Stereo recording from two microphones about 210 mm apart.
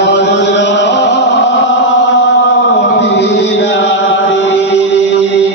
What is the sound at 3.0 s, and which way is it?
Music, 55° left (ahead or behind).